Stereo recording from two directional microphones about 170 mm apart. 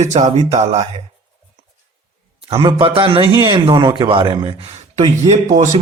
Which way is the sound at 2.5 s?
30° right (ahead or behind).